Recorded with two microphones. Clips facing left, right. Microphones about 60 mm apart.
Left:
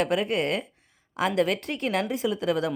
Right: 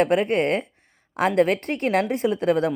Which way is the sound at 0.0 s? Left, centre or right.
Right.